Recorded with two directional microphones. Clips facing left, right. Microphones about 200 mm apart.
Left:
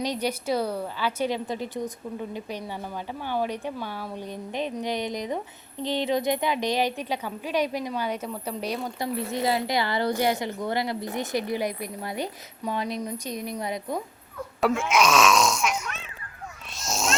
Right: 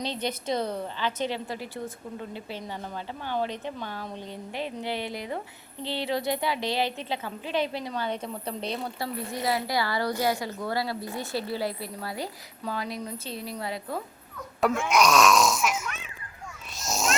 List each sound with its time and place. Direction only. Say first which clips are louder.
0.0 s speech: left 3 dB; 10° left (ahead or behind)
9.3 s a woman's voice: left 2 dB; 25° left (ahead or behind)
14.6 s speech: left 1 dB; centre (ahead or behind)
16.7 s a sound: even; centre (ahead or behind)